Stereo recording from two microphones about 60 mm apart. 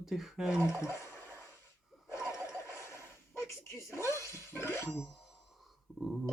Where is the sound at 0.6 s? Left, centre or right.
Left.